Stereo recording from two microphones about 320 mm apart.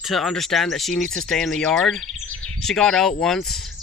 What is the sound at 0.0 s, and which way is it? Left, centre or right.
Speech, centre.